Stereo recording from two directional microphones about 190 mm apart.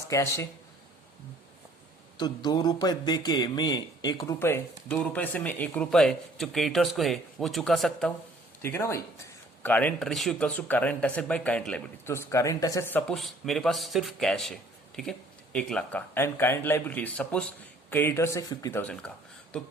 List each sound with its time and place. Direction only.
0.1 s speech: 15° left (ahead or behind)
2.1 s a man's voice: 20° left (ahead or behind); by 8.1 s centre (ahead or behind)
8.6 s speech: 15° left (ahead or behind)